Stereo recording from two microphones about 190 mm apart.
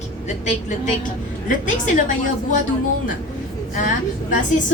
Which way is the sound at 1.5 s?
45° left (ahead or behind).